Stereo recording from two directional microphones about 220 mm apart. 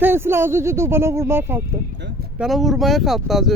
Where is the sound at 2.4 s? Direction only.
Centre (ahead or behind).